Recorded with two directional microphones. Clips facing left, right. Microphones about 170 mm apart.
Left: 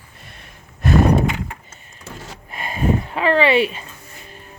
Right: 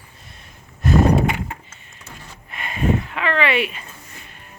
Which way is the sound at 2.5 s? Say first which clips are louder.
Left 1 dB; 35° left (ahead or behind).